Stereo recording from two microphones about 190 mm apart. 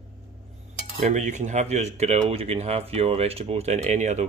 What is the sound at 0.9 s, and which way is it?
Speech, 40° right (ahead or behind).